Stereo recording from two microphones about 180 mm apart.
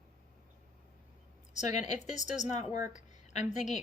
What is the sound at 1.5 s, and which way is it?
A woman's voice, 40° left (ahead or behind).